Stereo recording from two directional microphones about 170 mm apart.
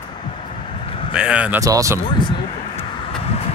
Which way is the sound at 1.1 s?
5° right (ahead or behind).